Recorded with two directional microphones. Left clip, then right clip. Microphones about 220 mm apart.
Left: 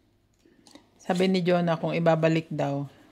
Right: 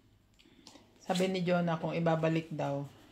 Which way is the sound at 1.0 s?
55° left (ahead or behind).